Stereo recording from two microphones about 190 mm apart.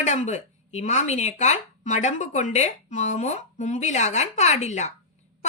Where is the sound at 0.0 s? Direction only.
40° left (ahead or behind).